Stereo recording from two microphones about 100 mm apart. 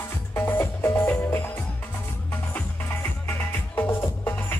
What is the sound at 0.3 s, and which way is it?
Music, 25° left (ahead or behind).